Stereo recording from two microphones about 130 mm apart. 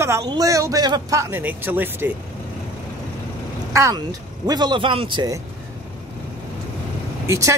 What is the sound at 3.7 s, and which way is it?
Speech, 25° right (ahead or behind).